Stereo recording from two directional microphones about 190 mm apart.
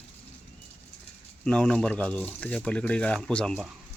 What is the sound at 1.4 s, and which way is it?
Speech, 5° left (ahead or behind).